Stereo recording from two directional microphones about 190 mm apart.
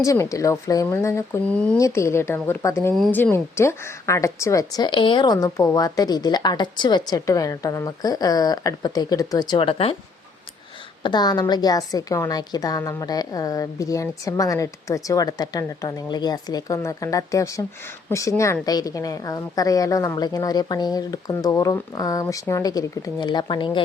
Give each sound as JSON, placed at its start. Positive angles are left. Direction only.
{"t": 0.0, "sound": "speech", "side_deg": 15}
{"t": 2.9, "sound": "speech", "side_deg": 0}
{"t": 3.2, "sound": "a woman's voice", "side_deg": 10}
{"t": 11.0, "sound": "a woman's voice", "side_deg": 20}